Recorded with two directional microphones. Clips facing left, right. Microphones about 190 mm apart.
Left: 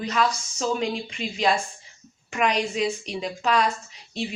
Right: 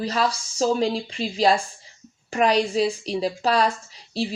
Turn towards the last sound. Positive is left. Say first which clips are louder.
# right 4 dB
turn(degrees=-35)  # may be behind; listen again after turning